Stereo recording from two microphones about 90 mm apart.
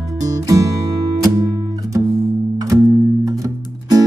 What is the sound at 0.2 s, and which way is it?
Music, 40° right (ahead or behind).